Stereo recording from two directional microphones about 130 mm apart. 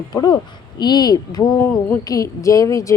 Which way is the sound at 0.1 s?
30° left (ahead or behind).